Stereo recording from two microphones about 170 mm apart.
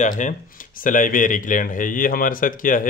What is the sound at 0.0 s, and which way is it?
Speech, 50° left (ahead or behind).